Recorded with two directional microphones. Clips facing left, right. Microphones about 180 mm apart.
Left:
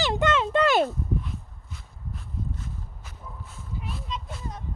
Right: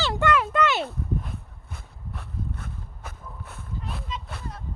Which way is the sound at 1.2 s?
55° right (ahead or behind).